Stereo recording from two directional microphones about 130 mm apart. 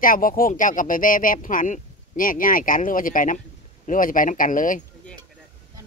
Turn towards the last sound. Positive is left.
turn(degrees=90)